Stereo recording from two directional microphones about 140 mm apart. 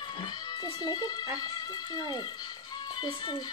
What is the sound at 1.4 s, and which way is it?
Speech, 30° left (ahead or behind).